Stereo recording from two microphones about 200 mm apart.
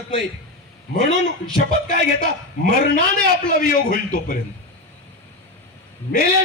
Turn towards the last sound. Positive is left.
turn(degrees=40)  # may be behind; listen again after turning